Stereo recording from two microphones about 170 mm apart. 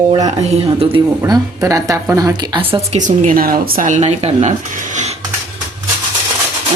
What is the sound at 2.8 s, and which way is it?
A woman's voice, 45° right (ahead or behind).